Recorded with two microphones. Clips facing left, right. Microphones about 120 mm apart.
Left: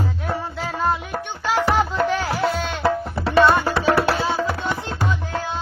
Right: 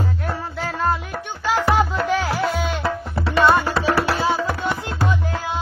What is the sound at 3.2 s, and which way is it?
Tabla, 25° left (ahead or behind).